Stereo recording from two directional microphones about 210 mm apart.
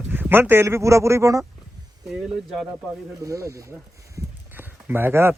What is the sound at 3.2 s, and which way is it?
Speech, 15° right (ahead or behind).